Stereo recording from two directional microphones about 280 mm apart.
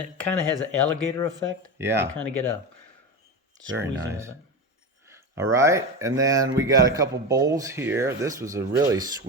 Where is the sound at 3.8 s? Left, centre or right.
Right.